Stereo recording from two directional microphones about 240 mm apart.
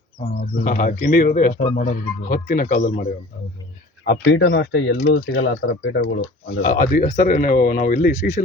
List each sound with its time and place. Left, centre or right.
0.5 s speech: left
4.0 s speech: left
6.6 s speech: left